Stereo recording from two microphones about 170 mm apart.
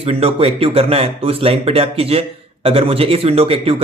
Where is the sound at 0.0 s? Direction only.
35° right (ahead or behind).